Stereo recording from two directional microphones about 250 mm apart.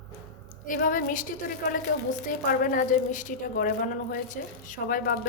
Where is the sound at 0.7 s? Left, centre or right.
Left.